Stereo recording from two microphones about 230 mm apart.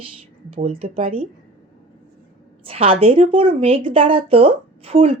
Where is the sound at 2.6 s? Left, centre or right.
Right.